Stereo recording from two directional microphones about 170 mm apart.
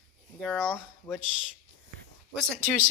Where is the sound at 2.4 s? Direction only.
5° left (ahead or behind).